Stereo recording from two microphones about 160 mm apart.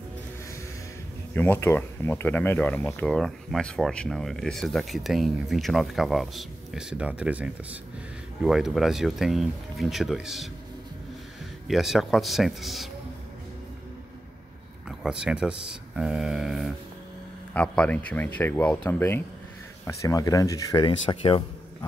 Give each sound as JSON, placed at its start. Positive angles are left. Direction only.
{"t": 1.3, "sound": "speech", "side_deg": 15}
{"t": 11.6, "sound": "speech", "side_deg": 0}
{"t": 14.9, "sound": "speech", "side_deg": -5}
{"t": 17.6, "sound": "speech", "side_deg": 10}